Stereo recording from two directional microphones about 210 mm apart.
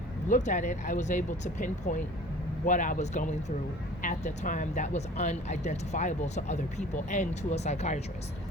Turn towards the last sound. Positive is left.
turn(degrees=30)  # may be behind; listen again after turning